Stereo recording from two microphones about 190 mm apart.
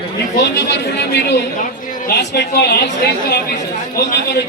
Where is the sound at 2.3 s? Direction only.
60° left (ahead or behind).